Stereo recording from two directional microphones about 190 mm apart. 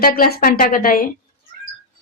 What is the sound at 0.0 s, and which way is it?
A woman's voice, 50° left (ahead or behind).